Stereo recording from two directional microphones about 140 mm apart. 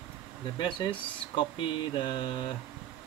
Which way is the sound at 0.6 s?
35° left (ahead or behind).